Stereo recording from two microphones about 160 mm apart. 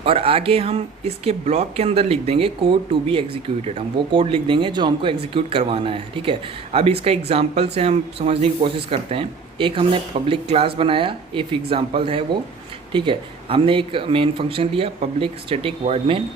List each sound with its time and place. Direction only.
0.0 s speech: 35° right (ahead or behind)